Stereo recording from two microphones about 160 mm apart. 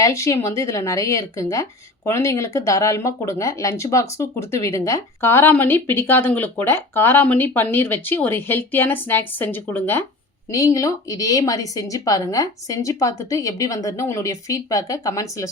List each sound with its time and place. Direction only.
0.0 s a woman's voice: 20° left (ahead or behind)